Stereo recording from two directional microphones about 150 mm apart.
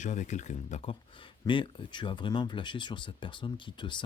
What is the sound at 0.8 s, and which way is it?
Speech, 35° left (ahead or behind).